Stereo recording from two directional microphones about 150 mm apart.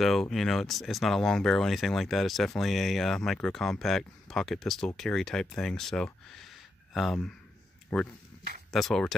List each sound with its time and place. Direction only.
0.0 s speech: centre (ahead or behind)